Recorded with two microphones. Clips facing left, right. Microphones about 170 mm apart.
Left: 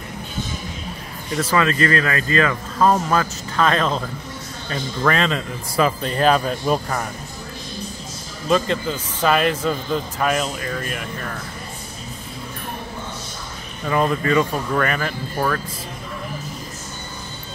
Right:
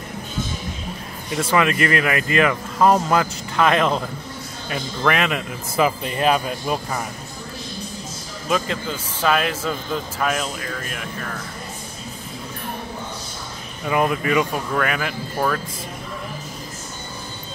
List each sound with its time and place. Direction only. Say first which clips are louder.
1.3 s speech: even; 20° right (ahead or behind)
8.5 s a man's voice: left 4 dB; 5° right (ahead or behind)
13.8 s a man's voice: left 1 dB; 10° right (ahead or behind)